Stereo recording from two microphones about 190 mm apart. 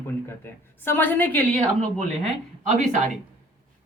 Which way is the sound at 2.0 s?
40° right (ahead or behind).